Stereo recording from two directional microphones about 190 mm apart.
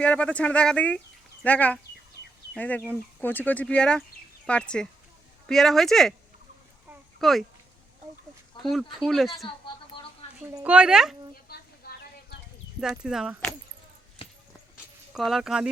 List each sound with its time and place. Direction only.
0.0 s speech: 5° left (ahead or behind)
7.2 s speech: centre (ahead or behind)
8.7 s speech: centre (ahead or behind)
10.6 s speech: 5° right (ahead or behind)
11.4 s a sound: 55° left (ahead or behind)
12.8 s speech: 5° right (ahead or behind)
14.2 s a sound: 30° left (ahead or behind)
15.1 s speech: centre (ahead or behind)